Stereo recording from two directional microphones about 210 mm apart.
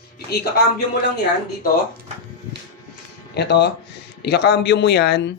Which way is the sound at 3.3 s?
55° left (ahead or behind).